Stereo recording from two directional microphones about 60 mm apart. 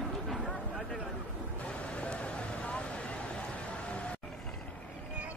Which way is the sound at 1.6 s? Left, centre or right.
Left.